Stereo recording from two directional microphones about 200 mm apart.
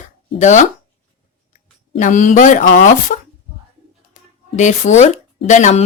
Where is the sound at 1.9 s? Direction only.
40° left (ahead or behind).